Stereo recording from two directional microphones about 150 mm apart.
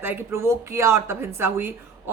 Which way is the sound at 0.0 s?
15° right (ahead or behind).